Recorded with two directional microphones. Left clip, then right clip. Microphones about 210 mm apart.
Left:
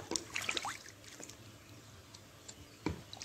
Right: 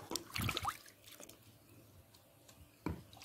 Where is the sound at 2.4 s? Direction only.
45° right (ahead or behind).